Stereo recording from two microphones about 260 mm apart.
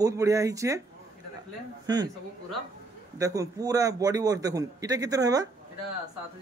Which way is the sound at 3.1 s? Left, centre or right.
Centre.